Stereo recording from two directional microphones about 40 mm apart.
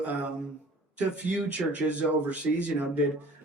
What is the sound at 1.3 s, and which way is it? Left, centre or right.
Speech, right.